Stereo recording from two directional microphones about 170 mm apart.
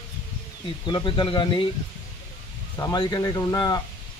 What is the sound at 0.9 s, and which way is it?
Speech, 25° left (ahead or behind).